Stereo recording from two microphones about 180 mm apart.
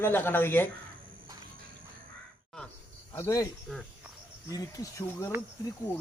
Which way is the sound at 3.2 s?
15° left (ahead or behind).